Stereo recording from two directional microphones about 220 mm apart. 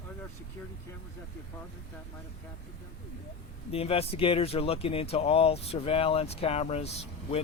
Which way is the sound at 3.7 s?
25° left (ahead or behind).